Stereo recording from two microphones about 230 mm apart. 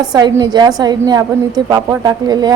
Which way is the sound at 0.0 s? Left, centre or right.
Centre.